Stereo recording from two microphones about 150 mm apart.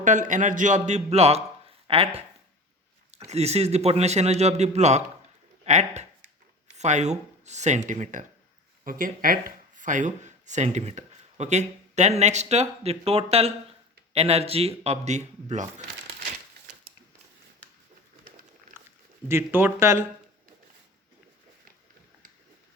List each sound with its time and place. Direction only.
0.0 s a man's voice: 60° right (ahead or behind); by 2.2 s 40° right (ahead or behind)
3.2 s a man's voice: 45° right (ahead or behind)
8.8 s a man's voice: 65° right (ahead or behind); by 15.6 s 50° right (ahead or behind)
18.7 s speech: 15° right (ahead or behind)